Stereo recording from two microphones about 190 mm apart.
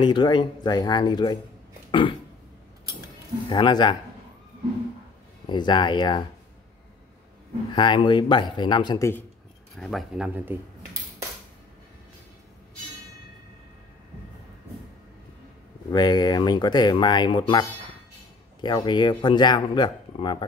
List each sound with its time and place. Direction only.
0.0 s speech: 25° left (ahead or behind)
1.9 s a sound: 25° left (ahead or behind)
3.4 s speech: 25° left (ahead or behind)
5.5 s speech: 25° left (ahead or behind)
7.7 s speech: 25° left (ahead or behind)
9.8 s speech: centre (ahead or behind)
15.9 s speech: 20° left (ahead or behind)